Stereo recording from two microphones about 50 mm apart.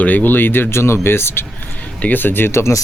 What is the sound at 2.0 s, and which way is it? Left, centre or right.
Speech, left.